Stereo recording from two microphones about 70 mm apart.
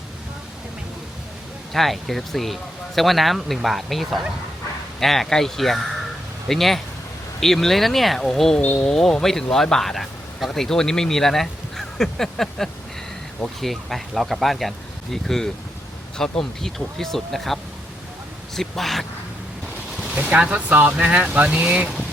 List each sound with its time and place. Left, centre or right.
1.7 s speech: centre
20.3 s speech: centre